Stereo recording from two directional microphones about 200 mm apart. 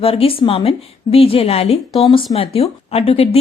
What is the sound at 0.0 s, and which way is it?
Speech, 30° left (ahead or behind).